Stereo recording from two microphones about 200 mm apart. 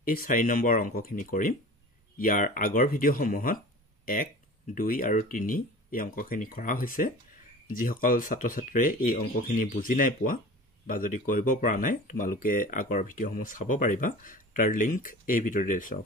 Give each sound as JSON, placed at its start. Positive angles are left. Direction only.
{"t": 0.0, "sound": "speech", "side_deg": 45}